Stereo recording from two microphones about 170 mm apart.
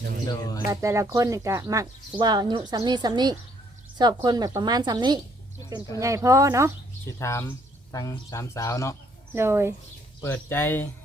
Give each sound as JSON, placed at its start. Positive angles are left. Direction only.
{"t": 0.3, "sound": "speech", "side_deg": 20}
{"t": 0.7, "sound": "speech", "side_deg": -20}
{"t": 7.2, "sound": "speech", "side_deg": 15}
{"t": 9.3, "sound": "speech", "side_deg": -15}
{"t": 10.2, "sound": "speech", "side_deg": 10}